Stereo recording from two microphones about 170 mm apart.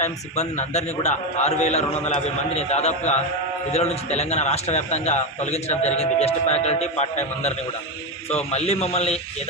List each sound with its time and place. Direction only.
0.0 s a man's voice: 40° left (ahead or behind)